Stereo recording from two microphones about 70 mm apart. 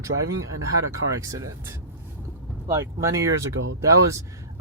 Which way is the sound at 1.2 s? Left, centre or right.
Right.